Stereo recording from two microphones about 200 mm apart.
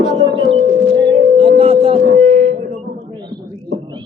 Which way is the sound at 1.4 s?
30° right (ahead or behind).